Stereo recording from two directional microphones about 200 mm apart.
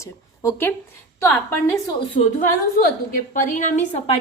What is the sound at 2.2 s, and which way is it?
A woman's voice, 45° left (ahead or behind).